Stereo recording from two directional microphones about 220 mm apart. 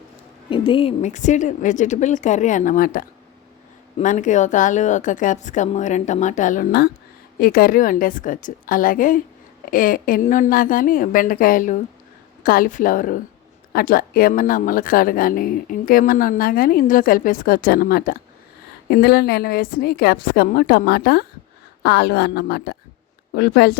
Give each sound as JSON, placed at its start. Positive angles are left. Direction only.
{"t": 0.5, "sound": "a woman's voice", "side_deg": 25}